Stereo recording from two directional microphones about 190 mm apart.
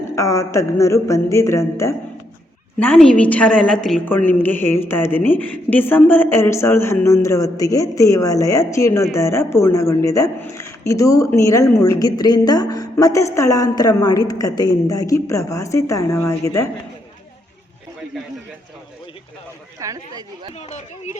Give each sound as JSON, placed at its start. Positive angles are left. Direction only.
{"t": 0.2, "sound": "a woman's voice", "side_deg": 15}
{"t": 19.8, "sound": "speech", "side_deg": -20}
{"t": 20.6, "sound": "speech", "side_deg": 35}